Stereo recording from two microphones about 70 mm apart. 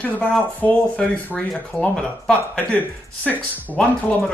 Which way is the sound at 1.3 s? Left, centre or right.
Centre.